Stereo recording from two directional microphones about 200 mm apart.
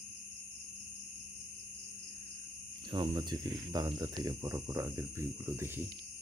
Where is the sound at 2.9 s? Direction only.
20° right (ahead or behind).